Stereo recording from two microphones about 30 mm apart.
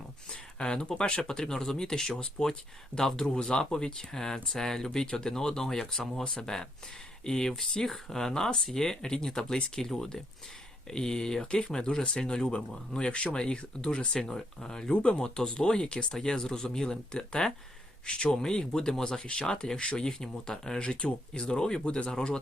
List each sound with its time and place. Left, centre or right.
0.3 s speech: left
1.3 s speech: left
2.4 s speech: left
2.9 s speech: left
3.3 s speech: left
7.6 s speech: centre
12.5 s speech: left
16.2 s speech: left
19.2 s speech: left
19.5 s speech: left
19.8 s speech: left
20.2 s speech: centre